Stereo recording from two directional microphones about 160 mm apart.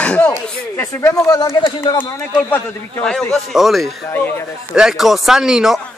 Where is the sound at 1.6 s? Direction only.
30° left (ahead or behind).